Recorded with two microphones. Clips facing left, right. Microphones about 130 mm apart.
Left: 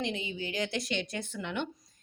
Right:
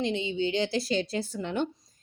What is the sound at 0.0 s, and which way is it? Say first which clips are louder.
A woman's voice: right 7 dB; 25° right (ahead or behind).